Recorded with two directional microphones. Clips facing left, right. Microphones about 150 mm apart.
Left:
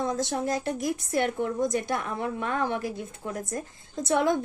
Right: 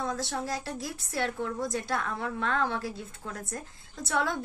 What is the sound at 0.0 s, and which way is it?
A woman's voice, 20° left (ahead or behind).